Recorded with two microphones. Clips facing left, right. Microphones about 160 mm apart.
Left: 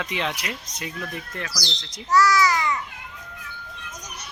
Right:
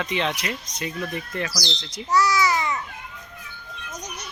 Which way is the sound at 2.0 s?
20° right (ahead or behind).